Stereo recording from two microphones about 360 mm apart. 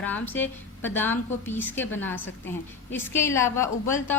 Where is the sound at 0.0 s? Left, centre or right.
Centre.